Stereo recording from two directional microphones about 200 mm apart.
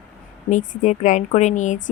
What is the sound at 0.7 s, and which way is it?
Speech, 40° left (ahead or behind).